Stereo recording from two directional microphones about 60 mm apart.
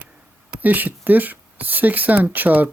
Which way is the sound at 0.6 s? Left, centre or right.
Right.